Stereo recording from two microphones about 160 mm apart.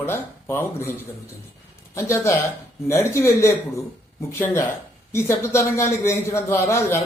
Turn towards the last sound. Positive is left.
turn(degrees=15)  # may be behind; listen again after turning